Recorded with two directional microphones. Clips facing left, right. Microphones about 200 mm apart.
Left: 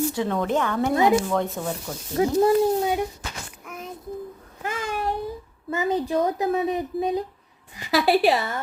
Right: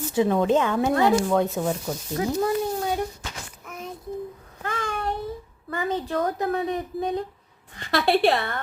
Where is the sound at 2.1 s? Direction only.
25° left (ahead or behind).